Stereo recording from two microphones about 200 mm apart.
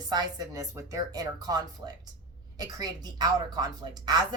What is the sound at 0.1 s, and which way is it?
A woman's voice, 20° right (ahead or behind).